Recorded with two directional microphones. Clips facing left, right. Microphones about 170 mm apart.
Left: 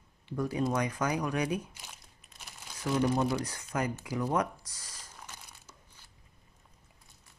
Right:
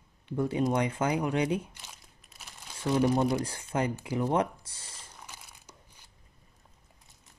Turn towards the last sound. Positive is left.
turn(degrees=-15)  # may be behind; listen again after turning